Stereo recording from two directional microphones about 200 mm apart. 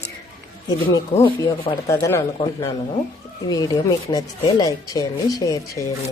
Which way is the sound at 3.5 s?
20° left (ahead or behind).